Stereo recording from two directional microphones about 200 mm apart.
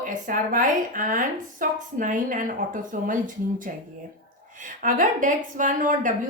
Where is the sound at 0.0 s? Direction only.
40° right (ahead or behind).